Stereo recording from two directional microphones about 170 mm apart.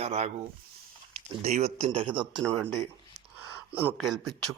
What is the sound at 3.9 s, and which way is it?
Speech, centre (ahead or behind).